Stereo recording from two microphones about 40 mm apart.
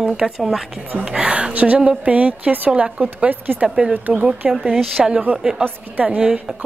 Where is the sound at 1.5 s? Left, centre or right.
Right.